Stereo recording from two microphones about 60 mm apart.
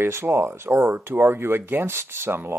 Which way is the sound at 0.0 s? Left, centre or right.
Right.